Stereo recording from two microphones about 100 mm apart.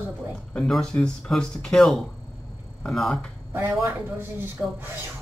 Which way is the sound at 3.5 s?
25° right (ahead or behind).